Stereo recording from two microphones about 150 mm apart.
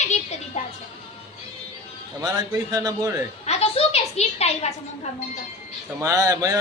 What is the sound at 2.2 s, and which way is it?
Speech, 25° right (ahead or behind).